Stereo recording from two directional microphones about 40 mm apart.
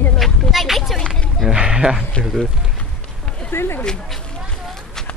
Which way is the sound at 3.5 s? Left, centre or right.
Left.